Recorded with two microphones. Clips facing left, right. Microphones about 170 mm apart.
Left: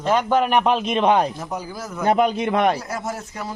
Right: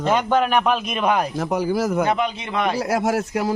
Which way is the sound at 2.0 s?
45° left (ahead or behind).